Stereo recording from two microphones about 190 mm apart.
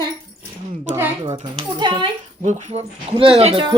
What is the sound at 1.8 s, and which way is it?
Speech, 25° right (ahead or behind).